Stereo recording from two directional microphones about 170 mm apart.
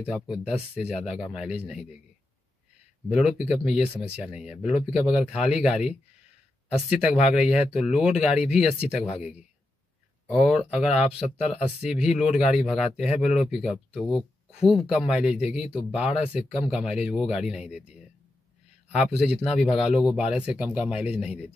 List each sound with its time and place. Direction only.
0.1 s speech: 5° right (ahead or behind)
3.1 s speech: 5° right (ahead or behind)
11.0 s a man's voice: 35° left (ahead or behind)
11.5 s speech: 5° right (ahead or behind)